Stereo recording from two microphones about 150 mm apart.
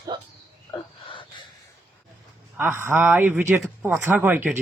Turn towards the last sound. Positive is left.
turn(degrees=-10)  # may be behind; listen again after turning